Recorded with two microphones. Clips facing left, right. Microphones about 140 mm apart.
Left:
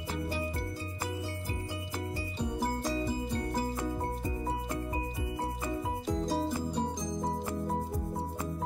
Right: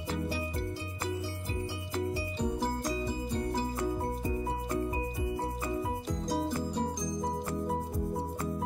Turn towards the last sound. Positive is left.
turn(degrees=0)  # may be behind; listen again after turning